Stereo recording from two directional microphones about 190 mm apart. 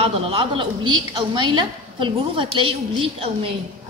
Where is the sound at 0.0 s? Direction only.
30° right (ahead or behind).